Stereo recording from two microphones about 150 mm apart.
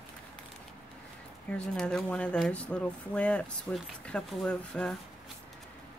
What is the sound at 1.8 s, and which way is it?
Speech, 5° left (ahead or behind).